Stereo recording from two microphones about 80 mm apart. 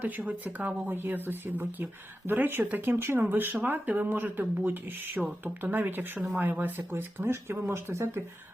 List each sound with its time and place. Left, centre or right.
0.0 s speech: centre